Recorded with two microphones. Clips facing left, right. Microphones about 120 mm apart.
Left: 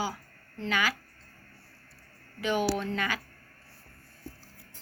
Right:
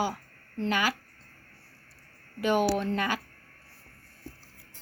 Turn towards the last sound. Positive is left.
turn(degrees=-45)  # may be behind; listen again after turning